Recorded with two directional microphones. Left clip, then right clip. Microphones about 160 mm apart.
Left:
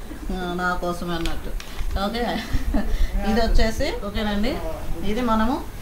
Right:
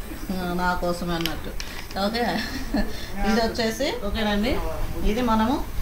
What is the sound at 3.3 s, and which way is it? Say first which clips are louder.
A woman's voice: left 1 dB; 10° right (ahead or behind).